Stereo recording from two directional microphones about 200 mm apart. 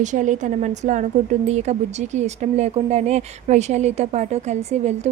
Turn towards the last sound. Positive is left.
turn(degrees=-35)  # may be behind; listen again after turning